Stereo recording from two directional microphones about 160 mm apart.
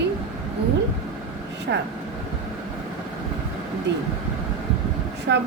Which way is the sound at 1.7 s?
90° right.